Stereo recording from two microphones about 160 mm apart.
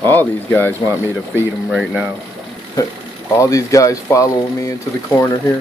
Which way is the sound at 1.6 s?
5° right (ahead or behind).